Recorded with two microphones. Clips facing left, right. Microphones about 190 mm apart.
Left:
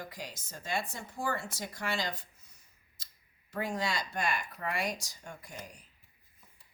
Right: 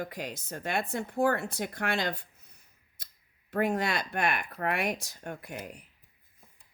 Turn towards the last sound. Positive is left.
turn(degrees=-60)  # may be behind; listen again after turning